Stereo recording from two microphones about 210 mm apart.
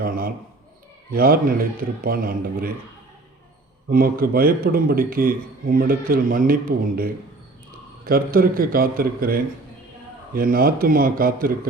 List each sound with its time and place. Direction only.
0.0 s a man's voice: 45° right (ahead or behind)
3.8 s a man's voice: 45° right (ahead or behind)